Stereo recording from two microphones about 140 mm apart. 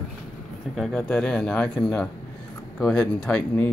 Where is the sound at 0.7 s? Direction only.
Centre (ahead or behind).